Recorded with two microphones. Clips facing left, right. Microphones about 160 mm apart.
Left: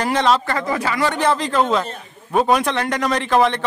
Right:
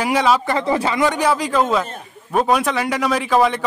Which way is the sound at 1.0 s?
10° right (ahead or behind).